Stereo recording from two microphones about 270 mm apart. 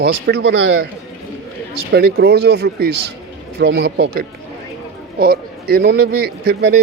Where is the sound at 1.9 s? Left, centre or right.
Right.